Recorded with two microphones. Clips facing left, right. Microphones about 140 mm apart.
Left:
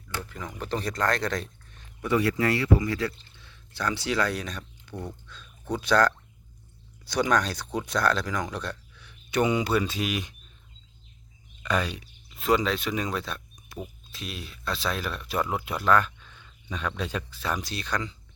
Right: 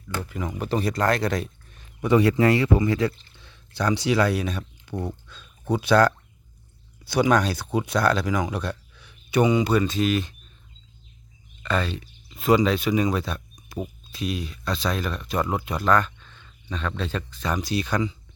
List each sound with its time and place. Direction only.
0.3 s speech: 10° right (ahead or behind)
2.0 s speech: 20° right (ahead or behind); by 10.3 s 10° left (ahead or behind)
11.6 s speech: 10° left (ahead or behind)
12.4 s speech: centre (ahead or behind)